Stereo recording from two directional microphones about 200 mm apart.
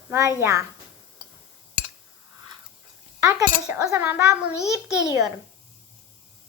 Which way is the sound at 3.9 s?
10° right (ahead or behind).